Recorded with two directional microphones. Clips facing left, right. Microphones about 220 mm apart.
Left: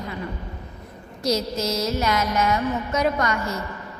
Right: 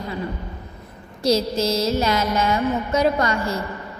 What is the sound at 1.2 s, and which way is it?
Mantra, 30° right (ahead or behind).